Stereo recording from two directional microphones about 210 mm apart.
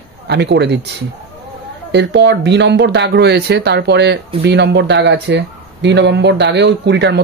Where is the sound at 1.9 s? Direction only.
55° right (ahead or behind).